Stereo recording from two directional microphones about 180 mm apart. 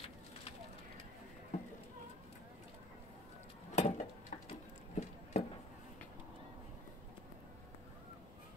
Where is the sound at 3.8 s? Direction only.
40° left (ahead or behind).